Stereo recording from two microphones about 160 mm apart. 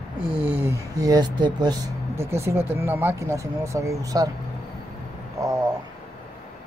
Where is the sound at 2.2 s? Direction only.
15° right (ahead or behind).